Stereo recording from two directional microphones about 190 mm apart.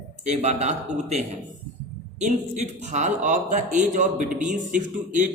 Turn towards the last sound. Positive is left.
turn(degrees=-40)  # may be behind; listen again after turning